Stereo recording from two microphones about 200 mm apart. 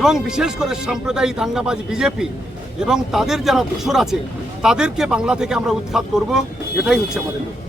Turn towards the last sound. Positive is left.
turn(degrees=-5)  # may be behind; listen again after turning